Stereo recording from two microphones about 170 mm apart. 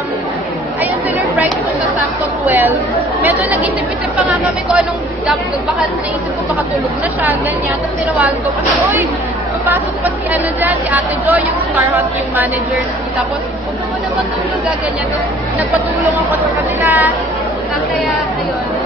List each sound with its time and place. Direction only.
2.4 s a woman's voice: 10° right (ahead or behind)
9.7 s speech: 10° right (ahead or behind)
16.8 s speech: 10° right (ahead or behind)